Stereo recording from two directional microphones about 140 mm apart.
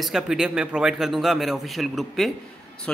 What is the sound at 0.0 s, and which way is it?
Speech, 5° right (ahead or behind).